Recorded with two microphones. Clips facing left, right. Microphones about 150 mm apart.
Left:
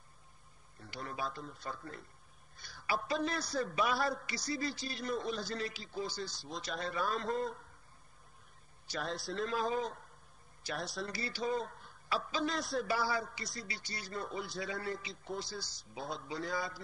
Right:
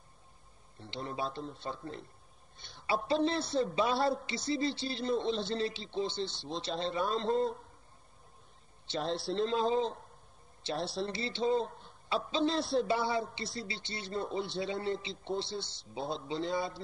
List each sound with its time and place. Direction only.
0.7 s a man's voice: 25° right (ahead or behind)
2.9 s a man's voice: 30° right (ahead or behind)
8.8 s a man's voice: 25° right (ahead or behind)